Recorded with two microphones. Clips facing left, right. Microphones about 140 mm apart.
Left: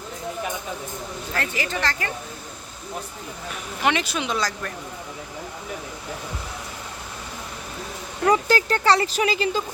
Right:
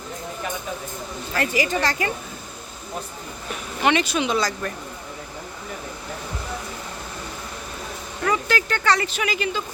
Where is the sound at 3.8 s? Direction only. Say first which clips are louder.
Right 3 dB; centre (ahead or behind).